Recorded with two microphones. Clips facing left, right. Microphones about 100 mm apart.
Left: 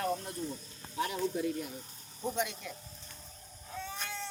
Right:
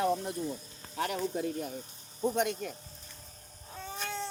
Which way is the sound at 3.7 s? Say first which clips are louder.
Right 2 dB; 40° right (ahead or behind).